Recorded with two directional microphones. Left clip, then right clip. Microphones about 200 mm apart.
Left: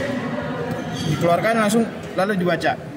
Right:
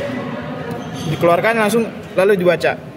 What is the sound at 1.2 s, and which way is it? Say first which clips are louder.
A man's voice: right 4 dB; 45° right (ahead or behind).